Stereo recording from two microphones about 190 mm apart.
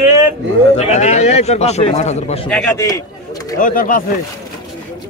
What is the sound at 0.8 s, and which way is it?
A man's voice, 35° left (ahead or behind).